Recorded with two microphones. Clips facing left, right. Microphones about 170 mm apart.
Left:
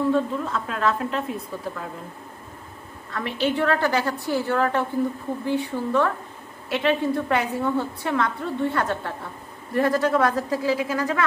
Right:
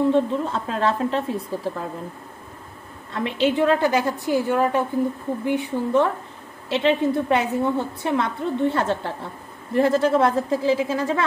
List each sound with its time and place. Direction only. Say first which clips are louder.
0.1 s a woman's voice: right 3 dB; 30° right (ahead or behind)
3.1 s a woman's voice: right 3 dB; 20° right (ahead or behind)